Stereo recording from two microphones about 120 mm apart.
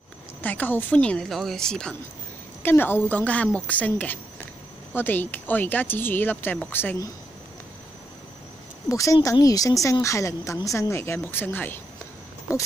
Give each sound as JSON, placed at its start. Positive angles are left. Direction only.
{"t": 0.4, "sound": "speech", "side_deg": 15}
{"t": 2.6, "sound": "speech", "side_deg": 15}
{"t": 8.8, "sound": "a woman's voice", "side_deg": 25}